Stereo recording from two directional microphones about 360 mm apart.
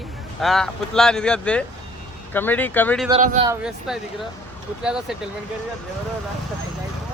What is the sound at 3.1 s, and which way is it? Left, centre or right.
Speech, centre.